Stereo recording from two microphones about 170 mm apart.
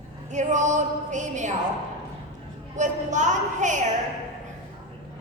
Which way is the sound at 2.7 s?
45° right (ahead or behind).